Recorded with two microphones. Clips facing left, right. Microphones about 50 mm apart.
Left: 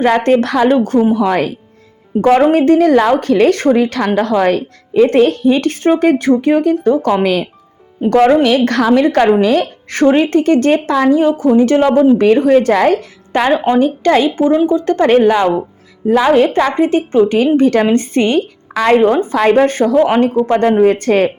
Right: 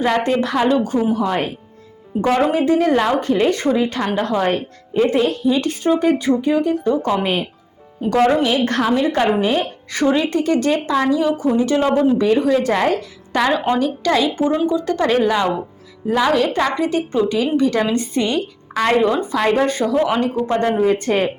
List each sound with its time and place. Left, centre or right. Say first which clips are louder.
0.0 s a woman's voice: left 6 dB; left
2.1 s a woman's voice: left 7 dB; left
2.5 s a woman's voice: left 7 dB; left
8.0 s a woman's voice: left 6 dB; left
8.4 s a woman's voice: left 6 dB; left
9.9 s a woman's voice: left 7 dB; left
13.3 s a woman's voice: left 5 dB; left
14.3 s speech: left 6 dB; left
14.7 s a woman's voice: left 7 dB; left
16.2 s a woman's voice: left 5 dB; left